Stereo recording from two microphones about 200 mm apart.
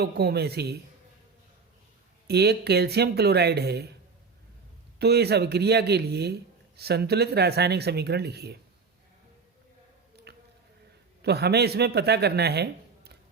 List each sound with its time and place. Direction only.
0.0 s speech: 55° right (ahead or behind)
2.2 s a man's voice: 55° right (ahead or behind)
4.9 s a man's voice: 55° right (ahead or behind)
10.3 s a sound: 55° right (ahead or behind)
11.2 s a man's voice: 55° right (ahead or behind)